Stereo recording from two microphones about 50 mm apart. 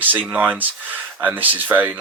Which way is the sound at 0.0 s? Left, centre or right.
Right.